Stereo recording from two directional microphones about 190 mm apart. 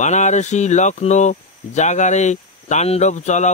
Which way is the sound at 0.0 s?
40° left (ahead or behind).